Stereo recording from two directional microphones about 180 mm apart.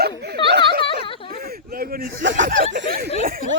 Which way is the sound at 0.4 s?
25° left (ahead or behind).